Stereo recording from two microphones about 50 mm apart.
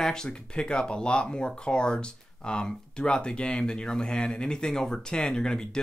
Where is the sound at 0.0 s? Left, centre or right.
Centre.